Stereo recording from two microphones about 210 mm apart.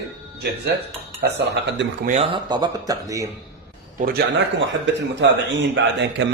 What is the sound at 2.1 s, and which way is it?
Speech, 25° right (ahead or behind).